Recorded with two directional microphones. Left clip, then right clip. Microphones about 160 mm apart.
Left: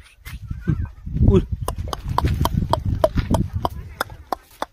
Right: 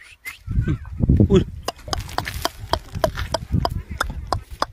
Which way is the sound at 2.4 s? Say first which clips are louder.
Left 2 dB; 15° left (ahead or behind).